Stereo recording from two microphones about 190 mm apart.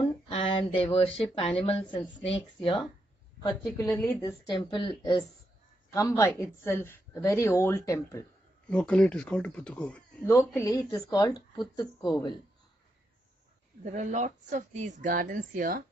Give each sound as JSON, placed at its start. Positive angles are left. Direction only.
{"t": 0.0, "sound": "a sound", "side_deg": 30}
{"t": 1.1, "sound": "speech", "side_deg": 30}
{"t": 3.8, "sound": "a woman's voice", "side_deg": 0}
{"t": 4.1, "sound": "speech", "side_deg": 15}
{"t": 13.9, "sound": "speech", "side_deg": -40}